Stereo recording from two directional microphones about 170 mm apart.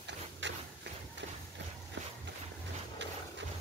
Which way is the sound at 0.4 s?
90° right.